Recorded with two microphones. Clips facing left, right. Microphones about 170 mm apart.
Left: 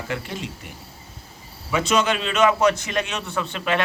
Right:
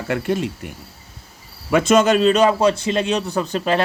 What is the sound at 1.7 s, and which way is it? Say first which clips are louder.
A man's voice: right 7 dB; 50° right (ahead or behind).